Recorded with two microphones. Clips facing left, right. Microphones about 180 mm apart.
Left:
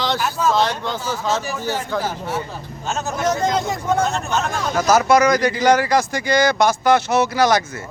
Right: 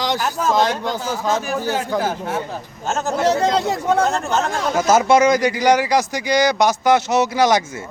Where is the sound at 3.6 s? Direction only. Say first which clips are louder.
Right 2 dB; 65° right (ahead or behind).